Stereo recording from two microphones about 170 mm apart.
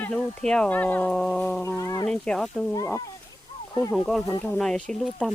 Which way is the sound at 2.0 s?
5° left (ahead or behind).